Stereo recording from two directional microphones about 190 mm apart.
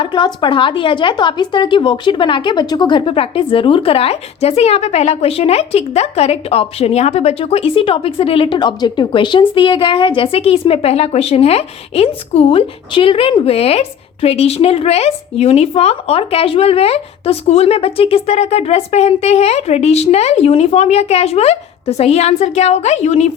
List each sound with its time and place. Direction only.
0.0 s a woman's voice: 25° left (ahead or behind)